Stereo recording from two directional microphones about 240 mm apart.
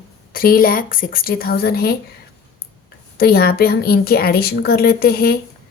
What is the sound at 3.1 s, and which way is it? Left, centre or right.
A woman's voice, left.